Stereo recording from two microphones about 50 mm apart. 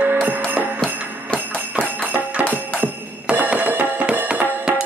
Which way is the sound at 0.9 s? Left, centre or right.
Right.